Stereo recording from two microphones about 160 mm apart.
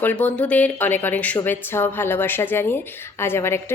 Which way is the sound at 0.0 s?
10° left (ahead or behind).